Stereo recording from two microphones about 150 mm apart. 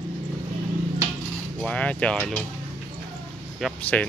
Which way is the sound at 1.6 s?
10° left (ahead or behind).